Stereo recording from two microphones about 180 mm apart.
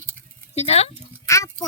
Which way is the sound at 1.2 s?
15° left (ahead or behind).